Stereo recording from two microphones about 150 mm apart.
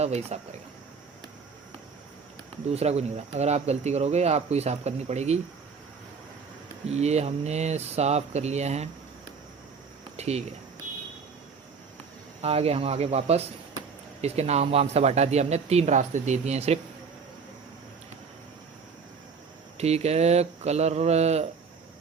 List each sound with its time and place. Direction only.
0.0 s speech: 45° right (ahead or behind)
2.6 s speech: 45° right (ahead or behind)
6.8 s speech: 45° right (ahead or behind)
10.2 s speech: 45° right (ahead or behind)
12.4 s speech: 40° right (ahead or behind)
19.7 s speech: 45° right (ahead or behind)